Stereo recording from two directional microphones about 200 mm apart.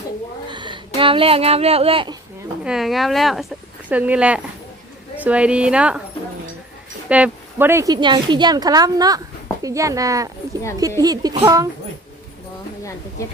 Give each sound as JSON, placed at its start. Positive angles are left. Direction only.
{"t": 0.5, "sound": "a sound", "side_deg": -25}
{"t": 0.9, "sound": "a woman's voice", "side_deg": -25}
{"t": 2.6, "sound": "a woman's voice", "side_deg": 0}
{"t": 7.1, "sound": "a woman's voice", "side_deg": -10}